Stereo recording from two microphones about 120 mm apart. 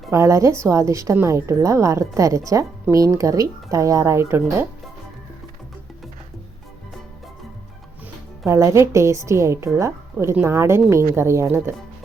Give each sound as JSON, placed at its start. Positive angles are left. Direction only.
{"t": 0.1, "sound": "a woman's voice", "side_deg": -25}
{"t": 8.4, "sound": "a woman's voice", "side_deg": -25}